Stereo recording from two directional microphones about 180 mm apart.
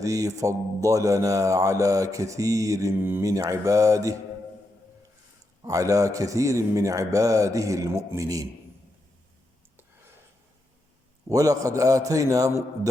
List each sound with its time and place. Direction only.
0.0 s mantra: 20° right (ahead or behind)
5.6 s mantra: 20° right (ahead or behind)
11.3 s a man's voice: 20° right (ahead or behind)